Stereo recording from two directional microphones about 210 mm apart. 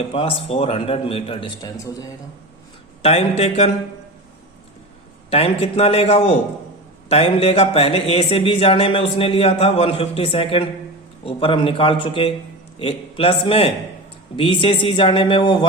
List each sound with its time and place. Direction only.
0.1 s speech: 25° left (ahead or behind)
3.0 s speech: 30° left (ahead or behind)
5.3 s speech: 25° left (ahead or behind)